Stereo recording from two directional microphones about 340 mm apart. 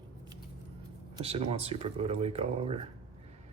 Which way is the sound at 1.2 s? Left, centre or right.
Centre.